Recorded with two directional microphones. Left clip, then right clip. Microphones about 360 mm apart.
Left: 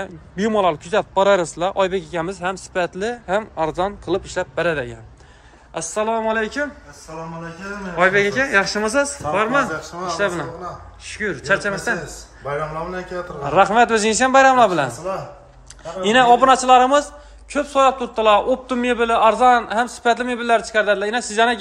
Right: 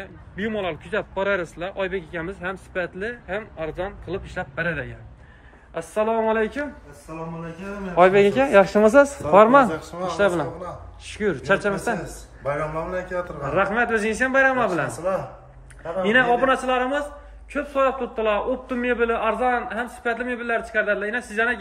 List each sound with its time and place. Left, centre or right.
0.0 s a man's voice: centre
7.9 s speech: centre
13.4 s a man's voice: centre
16.1 s a man's voice: centre